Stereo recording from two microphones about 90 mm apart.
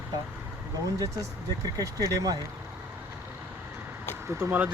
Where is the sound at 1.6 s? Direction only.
40° right (ahead or behind).